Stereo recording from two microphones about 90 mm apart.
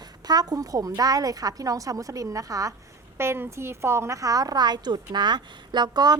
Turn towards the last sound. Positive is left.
turn(degrees=-50)  # may be behind; listen again after turning